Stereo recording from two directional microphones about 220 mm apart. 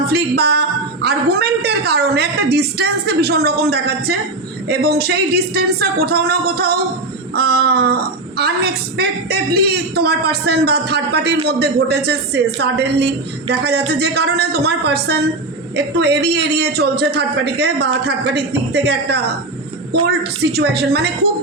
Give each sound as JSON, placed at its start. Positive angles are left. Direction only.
{"t": 0.1, "sound": "a woman's voice", "side_deg": -45}